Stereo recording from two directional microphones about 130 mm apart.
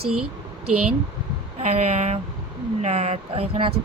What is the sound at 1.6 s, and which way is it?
A woman's voice, 55° right (ahead or behind).